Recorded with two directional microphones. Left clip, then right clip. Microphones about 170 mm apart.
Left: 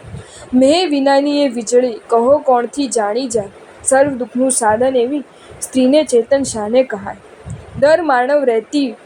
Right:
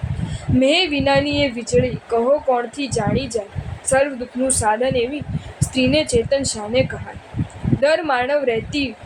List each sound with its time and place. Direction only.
0.6 s a woman's voice: 35° left (ahead or behind)